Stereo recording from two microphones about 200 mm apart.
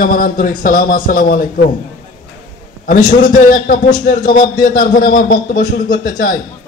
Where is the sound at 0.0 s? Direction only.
45° left (ahead or behind).